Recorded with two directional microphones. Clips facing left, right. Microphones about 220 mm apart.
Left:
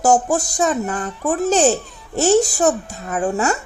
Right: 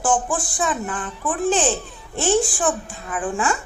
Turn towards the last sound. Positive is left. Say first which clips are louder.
# left 4 dB
turn(degrees=40)  # may be behind; listen again after turning